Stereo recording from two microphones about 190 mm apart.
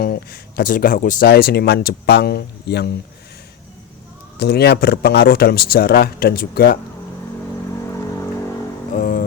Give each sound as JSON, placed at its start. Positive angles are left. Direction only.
{"t": 0.0, "sound": "speech", "side_deg": 55}
{"t": 4.4, "sound": "speech", "side_deg": 60}
{"t": 9.0, "sound": "music", "side_deg": 45}